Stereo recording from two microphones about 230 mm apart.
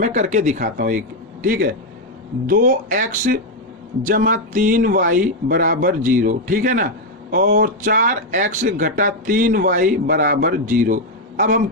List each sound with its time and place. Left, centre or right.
0.0 s speech: right